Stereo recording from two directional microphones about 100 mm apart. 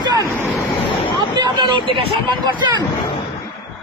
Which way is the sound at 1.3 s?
50° right (ahead or behind).